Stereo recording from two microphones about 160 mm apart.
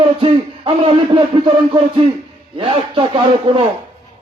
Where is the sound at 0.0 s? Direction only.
35° right (ahead or behind).